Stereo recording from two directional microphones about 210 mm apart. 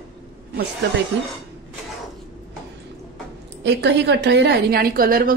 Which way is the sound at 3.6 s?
55° right (ahead or behind).